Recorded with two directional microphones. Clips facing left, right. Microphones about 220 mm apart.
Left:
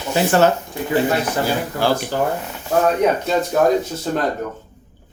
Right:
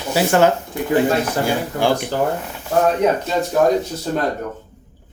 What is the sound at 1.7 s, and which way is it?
Speech, 15° right (ahead or behind).